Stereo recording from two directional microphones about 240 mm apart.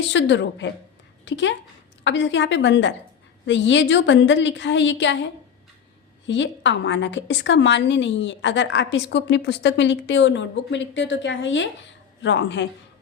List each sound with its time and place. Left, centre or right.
0.1 s a woman's voice: left